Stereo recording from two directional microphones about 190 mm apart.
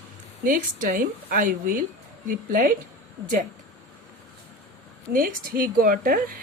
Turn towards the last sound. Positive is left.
turn(degrees=-45)  # may be behind; listen again after turning